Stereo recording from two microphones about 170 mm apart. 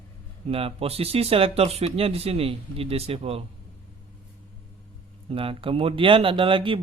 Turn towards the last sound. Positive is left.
turn(degrees=-30)  # may be behind; listen again after turning